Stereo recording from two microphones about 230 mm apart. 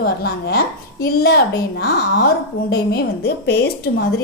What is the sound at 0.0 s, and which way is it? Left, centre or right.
A woman's voice, left.